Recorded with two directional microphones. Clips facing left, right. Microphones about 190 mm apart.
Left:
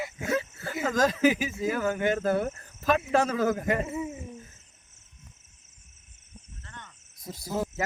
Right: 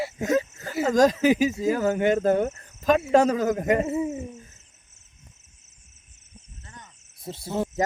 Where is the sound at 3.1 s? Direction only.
40° right (ahead or behind).